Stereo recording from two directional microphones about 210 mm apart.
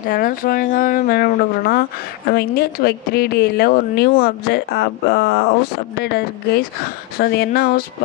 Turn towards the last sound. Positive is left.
turn(degrees=45)  # may be behind; listen again after turning